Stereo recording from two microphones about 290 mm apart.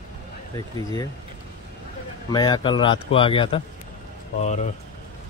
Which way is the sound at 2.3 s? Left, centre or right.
Centre.